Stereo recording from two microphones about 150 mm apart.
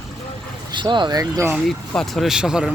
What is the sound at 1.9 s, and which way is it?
Speech, 5° left (ahead or behind).